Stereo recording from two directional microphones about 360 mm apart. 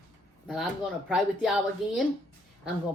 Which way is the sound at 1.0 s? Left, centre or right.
Centre.